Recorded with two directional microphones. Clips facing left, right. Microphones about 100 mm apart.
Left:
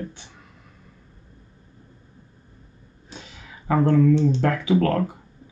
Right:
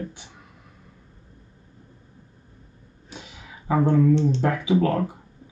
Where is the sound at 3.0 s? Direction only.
15° right (ahead or behind).